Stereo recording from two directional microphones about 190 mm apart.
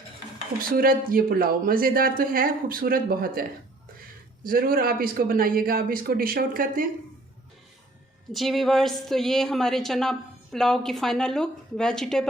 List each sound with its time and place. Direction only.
0.7 s speech: 50° right (ahead or behind)
4.4 s speech: 50° right (ahead or behind)
8.3 s a woman's voice: centre (ahead or behind)